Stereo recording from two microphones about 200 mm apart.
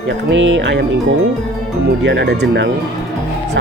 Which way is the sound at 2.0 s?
60° right (ahead or behind).